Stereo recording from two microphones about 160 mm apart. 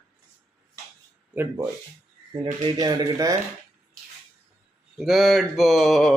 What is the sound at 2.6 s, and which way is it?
Speech, 25° right (ahead or behind).